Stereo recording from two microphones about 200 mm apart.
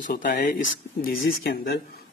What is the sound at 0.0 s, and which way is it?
Speech, 45° left (ahead or behind).